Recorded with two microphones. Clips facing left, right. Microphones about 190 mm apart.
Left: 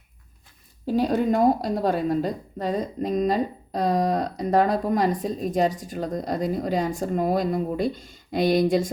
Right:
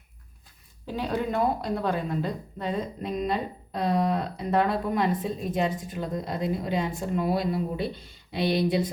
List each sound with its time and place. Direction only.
0.9 s a woman's voice: 40° left (ahead or behind)